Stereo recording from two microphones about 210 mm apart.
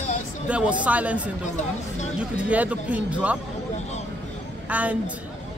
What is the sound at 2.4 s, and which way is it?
Speech, 5° right (ahead or behind).